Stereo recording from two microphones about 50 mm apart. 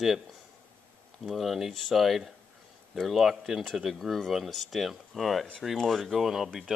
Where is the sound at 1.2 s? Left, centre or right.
Centre.